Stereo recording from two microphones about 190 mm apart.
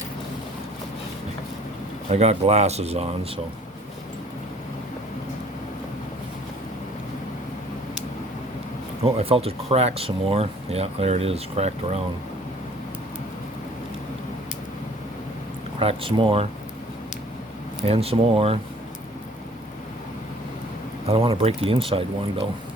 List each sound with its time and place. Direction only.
2.0 s speech: 35° right (ahead or behind)
9.1 s speech: 30° right (ahead or behind)
15.8 s speech: 30° right (ahead or behind)
17.8 s speech: 30° right (ahead or behind)
21.1 s speech: 30° right (ahead or behind)